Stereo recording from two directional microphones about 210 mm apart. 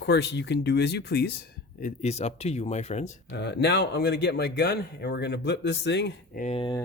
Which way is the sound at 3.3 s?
55° left (ahead or behind).